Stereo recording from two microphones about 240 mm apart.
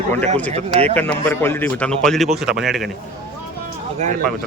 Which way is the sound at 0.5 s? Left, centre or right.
Right.